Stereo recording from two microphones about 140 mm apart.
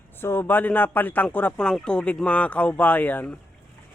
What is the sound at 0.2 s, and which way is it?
Speech, 15° left (ahead or behind).